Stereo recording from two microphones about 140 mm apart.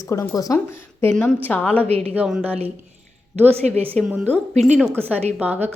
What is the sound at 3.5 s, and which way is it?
Speech, 45° right (ahead or behind).